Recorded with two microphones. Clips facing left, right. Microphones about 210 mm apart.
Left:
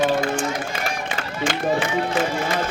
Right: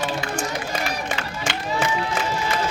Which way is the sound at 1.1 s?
55° left (ahead or behind).